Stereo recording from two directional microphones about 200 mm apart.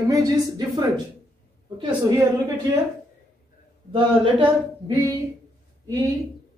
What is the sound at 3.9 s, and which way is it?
A woman's voice, 25° right (ahead or behind).